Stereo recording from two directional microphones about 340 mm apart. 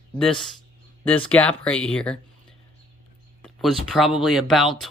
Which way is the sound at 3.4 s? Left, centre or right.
Centre.